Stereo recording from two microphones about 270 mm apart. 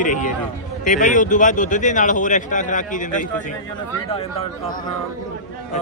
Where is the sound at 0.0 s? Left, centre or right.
Left.